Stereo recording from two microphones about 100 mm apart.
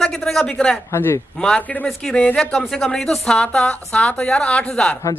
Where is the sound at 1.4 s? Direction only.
10° left (ahead or behind).